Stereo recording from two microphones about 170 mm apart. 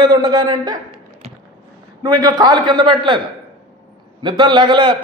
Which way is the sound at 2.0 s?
25° right (ahead or behind).